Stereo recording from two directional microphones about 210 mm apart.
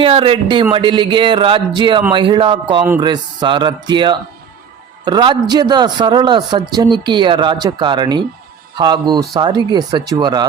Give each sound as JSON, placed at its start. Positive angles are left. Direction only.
{"t": 0.0, "sound": "a man's voice", "side_deg": -25}